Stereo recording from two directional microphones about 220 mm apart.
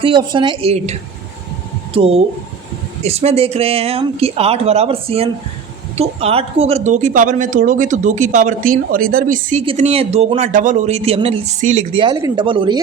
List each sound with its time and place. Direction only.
0.0 s speech: 20° right (ahead or behind)
12.0 s speech: 20° right (ahead or behind)